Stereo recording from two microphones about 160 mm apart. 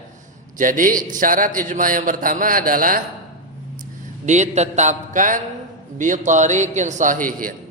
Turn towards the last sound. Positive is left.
turn(degrees=-55)  # may be behind; listen again after turning